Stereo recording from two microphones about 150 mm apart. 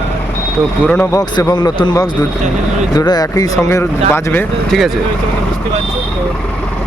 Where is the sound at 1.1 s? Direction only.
25° left (ahead or behind).